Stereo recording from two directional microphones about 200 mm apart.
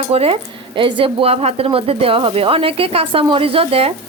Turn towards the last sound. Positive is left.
turn(degrees=-30)  # may be behind; listen again after turning